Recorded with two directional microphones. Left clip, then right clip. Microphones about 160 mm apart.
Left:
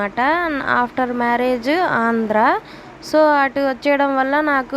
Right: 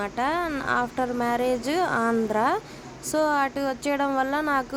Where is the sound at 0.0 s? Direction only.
20° left (ahead or behind).